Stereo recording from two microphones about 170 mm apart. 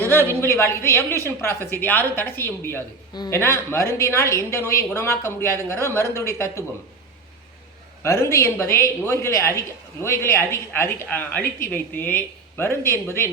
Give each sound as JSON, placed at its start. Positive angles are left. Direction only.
{"t": 0.0, "sound": "a woman's voice", "side_deg": 10}
{"t": 8.0, "sound": "a woman's voice", "side_deg": 15}